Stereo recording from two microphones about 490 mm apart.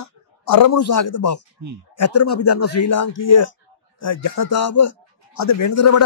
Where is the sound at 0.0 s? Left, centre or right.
Left.